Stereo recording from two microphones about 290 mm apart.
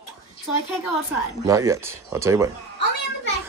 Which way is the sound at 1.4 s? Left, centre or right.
Centre.